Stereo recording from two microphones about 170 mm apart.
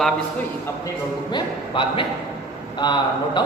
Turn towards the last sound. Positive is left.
turn(degrees=25)  # may be behind; listen again after turning